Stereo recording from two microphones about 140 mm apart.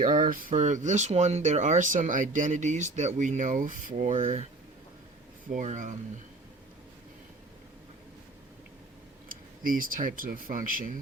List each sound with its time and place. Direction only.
0.0 s speech: 70° right (ahead or behind)
4.1 s speech: 45° right (ahead or behind)
5.5 s speech: 60° right (ahead or behind)
9.3 s speech: 85° right